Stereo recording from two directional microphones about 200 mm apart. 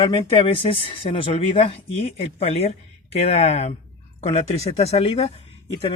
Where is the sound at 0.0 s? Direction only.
25° left (ahead or behind).